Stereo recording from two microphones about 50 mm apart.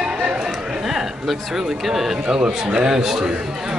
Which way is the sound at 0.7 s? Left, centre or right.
Centre.